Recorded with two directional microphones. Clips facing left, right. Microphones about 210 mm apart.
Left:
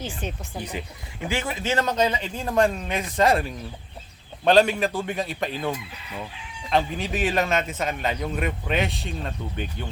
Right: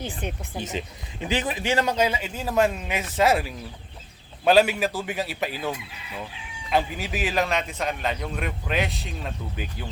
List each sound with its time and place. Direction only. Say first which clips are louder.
0.6 s a man's voice: right 2 dB; 20° right (ahead or behind); by 9.8 s 5° right (ahead or behind)